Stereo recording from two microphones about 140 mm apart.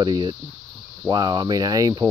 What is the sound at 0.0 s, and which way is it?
Speech, 30° right (ahead or behind).